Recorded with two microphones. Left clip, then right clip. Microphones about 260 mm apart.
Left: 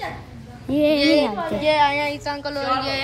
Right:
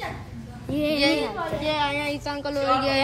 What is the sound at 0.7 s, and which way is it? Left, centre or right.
Speech, left.